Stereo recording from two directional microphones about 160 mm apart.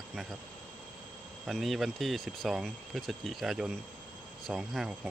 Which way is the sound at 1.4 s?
Centre (ahead or behind).